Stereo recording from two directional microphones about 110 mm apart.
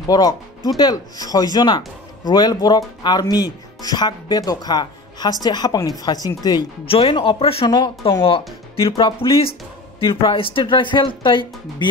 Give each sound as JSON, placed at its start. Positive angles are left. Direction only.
{"t": 0.7, "sound": "speech", "side_deg": 40}
{"t": 6.9, "sound": "speech", "side_deg": 55}
{"t": 7.6, "sound": "speech", "side_deg": 40}
{"t": 8.7, "sound": "speech", "side_deg": 55}